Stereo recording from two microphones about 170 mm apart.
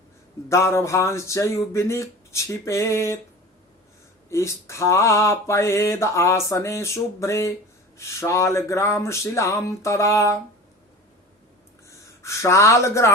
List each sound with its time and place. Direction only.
0.4 s mantra: 15° left (ahead or behind)
4.3 s mantra: 15° left (ahead or behind)
11.9 s speech: 15° left (ahead or behind)